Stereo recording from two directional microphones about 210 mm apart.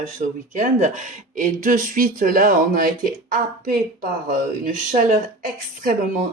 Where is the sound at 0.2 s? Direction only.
40° right (ahead or behind).